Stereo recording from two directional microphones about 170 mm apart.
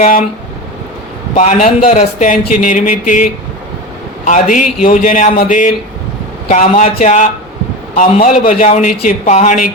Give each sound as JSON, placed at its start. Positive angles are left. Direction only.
{"t": 0.0, "sound": "vehicle", "side_deg": 55}
{"t": 1.4, "sound": "speech", "side_deg": 45}
{"t": 4.3, "sound": "speech", "side_deg": 50}